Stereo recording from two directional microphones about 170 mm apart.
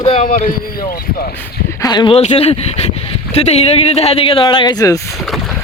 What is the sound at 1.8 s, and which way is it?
Speech, 25° left (ahead or behind).